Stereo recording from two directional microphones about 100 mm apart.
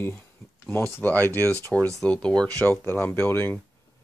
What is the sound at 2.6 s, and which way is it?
Speech, 20° left (ahead or behind).